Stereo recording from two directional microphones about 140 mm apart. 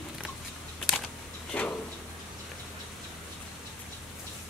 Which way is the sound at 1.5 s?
10° left (ahead or behind).